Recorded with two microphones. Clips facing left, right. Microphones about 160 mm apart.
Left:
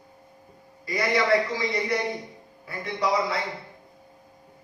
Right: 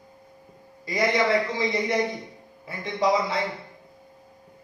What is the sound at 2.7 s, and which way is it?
Speech, 20° right (ahead or behind).